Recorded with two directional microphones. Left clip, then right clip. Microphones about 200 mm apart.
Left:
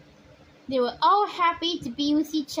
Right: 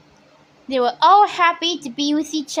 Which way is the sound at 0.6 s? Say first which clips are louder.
Right 7 dB; 20° right (ahead or behind).